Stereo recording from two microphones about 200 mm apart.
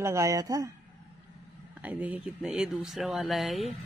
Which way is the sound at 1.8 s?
5° right (ahead or behind).